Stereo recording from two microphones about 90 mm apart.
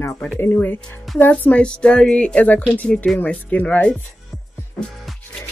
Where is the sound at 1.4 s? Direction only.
15° left (ahead or behind).